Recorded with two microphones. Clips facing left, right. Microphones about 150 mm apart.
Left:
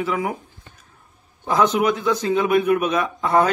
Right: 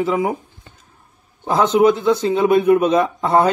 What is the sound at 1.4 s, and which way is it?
Speech, 30° right (ahead or behind).